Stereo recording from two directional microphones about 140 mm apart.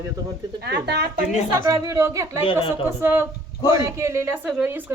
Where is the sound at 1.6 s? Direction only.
20° right (ahead or behind).